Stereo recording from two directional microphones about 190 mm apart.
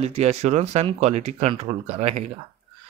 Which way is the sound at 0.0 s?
35° right (ahead or behind).